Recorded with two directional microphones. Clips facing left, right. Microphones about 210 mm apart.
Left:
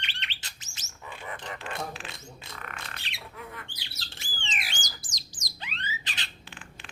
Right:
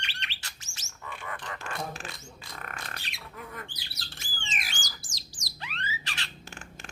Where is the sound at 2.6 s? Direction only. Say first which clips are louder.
Right 2 dB; 40° right (ahead or behind).